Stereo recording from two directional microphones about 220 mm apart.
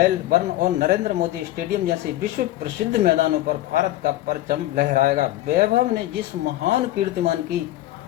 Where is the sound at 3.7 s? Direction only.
40° right (ahead or behind).